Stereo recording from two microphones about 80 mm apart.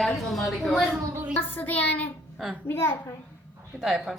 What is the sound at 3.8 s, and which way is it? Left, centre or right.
Speech, centre.